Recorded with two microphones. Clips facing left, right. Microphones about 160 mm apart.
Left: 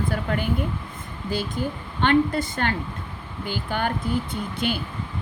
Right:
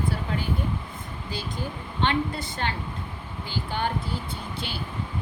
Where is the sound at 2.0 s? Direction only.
55° left (ahead or behind).